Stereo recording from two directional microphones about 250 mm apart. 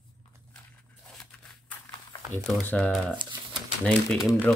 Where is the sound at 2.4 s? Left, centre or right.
Centre.